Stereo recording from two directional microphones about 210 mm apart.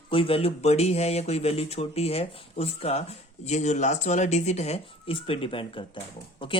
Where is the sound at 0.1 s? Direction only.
25° left (ahead or behind).